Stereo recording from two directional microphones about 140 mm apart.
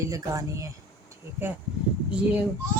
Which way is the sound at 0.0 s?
25° right (ahead or behind).